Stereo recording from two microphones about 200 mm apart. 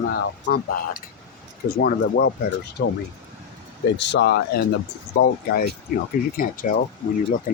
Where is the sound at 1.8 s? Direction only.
55° left (ahead or behind).